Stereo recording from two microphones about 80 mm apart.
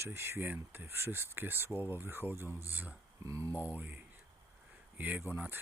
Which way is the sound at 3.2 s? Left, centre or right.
Right.